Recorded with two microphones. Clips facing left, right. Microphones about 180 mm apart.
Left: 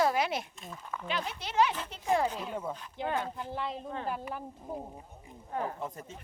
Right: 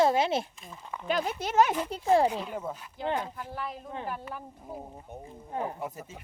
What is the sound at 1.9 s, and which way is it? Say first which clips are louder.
Speech: right 6 dB; 35° right (ahead or behind).